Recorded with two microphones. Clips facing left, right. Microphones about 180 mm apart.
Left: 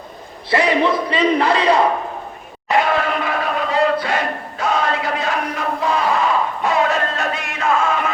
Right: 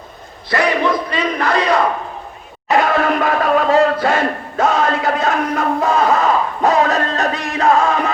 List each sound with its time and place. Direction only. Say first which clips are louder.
0.5 s battle cry: even; 30° left (ahead or behind)
2.6 s crowd: right 3 dB; 45° right (ahead or behind)